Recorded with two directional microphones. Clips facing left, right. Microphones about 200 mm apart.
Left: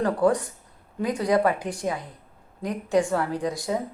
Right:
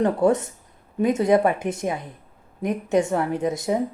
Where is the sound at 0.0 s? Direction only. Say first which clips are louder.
Right 2 dB; 25° right (ahead or behind).